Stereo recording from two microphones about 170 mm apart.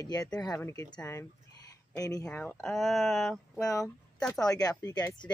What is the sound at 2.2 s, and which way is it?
Speech, 10° left (ahead or behind).